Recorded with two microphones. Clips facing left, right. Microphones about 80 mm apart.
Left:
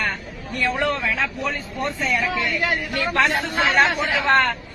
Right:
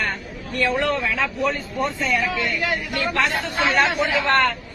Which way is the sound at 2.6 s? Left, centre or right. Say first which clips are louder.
Left 1 dB; left.